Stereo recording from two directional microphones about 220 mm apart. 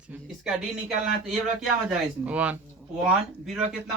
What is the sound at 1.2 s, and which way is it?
Speech, centre (ahead or behind).